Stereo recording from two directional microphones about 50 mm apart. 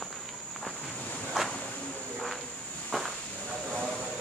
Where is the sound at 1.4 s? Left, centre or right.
Centre.